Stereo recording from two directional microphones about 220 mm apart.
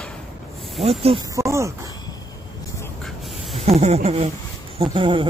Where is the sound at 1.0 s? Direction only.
20° right (ahead or behind).